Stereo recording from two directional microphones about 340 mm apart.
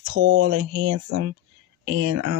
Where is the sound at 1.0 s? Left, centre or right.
Right.